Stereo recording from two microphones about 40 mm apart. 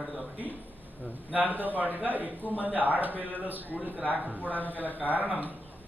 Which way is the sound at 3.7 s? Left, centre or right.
Right.